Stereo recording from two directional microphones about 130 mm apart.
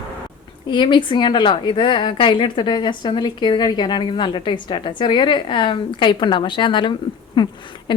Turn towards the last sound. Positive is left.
turn(degrees=35)  # may be behind; listen again after turning